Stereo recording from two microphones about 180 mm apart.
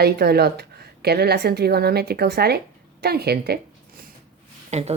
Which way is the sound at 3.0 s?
60° right (ahead or behind).